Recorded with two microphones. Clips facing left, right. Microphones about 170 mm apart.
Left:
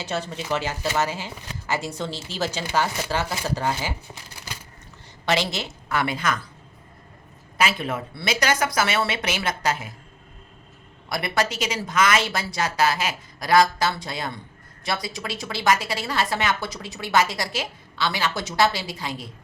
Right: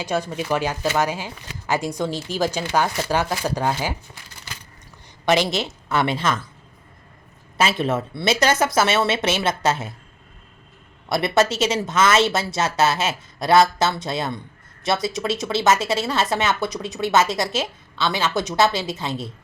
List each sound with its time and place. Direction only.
0.0 s speech: 15° right (ahead or behind)
5.2 s a woman's voice: 20° right (ahead or behind)
7.6 s a woman's voice: 25° right (ahead or behind)
11.1 s a woman's voice: 25° right (ahead or behind)